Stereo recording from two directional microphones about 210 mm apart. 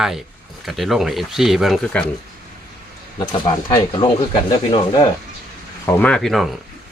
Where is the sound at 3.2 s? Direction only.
20° left (ahead or behind).